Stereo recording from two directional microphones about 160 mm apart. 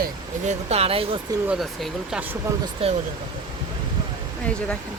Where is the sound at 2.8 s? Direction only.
40° right (ahead or behind).